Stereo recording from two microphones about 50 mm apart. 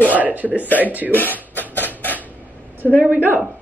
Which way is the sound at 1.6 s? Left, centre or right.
Left.